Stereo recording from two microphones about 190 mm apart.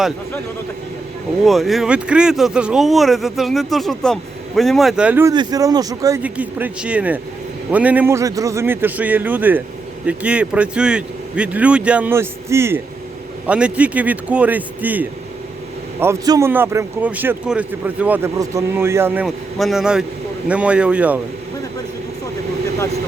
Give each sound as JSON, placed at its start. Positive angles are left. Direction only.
{"t": 1.5, "sound": "speech", "side_deg": 0}
{"t": 5.3, "sound": "speech", "side_deg": -20}